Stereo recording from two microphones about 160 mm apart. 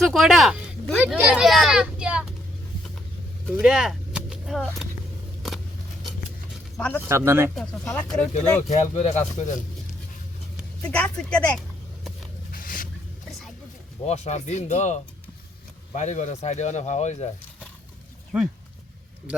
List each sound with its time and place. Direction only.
0.0 s speech: centre (ahead or behind)
3.4 s gunshot: 5° right (ahead or behind)
5.4 s a sound: centre (ahead or behind)
7.0 s speech: 15° right (ahead or behind)
7.5 s speech: 5° left (ahead or behind)
8.7 s speech: 45° left (ahead or behind)
10.8 s speech: 10° left (ahead or behind)
12.5 s a sound: 60° left (ahead or behind)
14.1 s speech: 45° left (ahead or behind)